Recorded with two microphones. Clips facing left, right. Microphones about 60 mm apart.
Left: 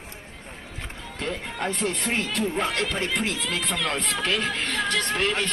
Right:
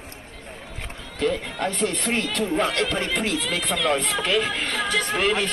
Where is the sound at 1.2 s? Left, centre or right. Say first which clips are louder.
Right 6 dB; centre.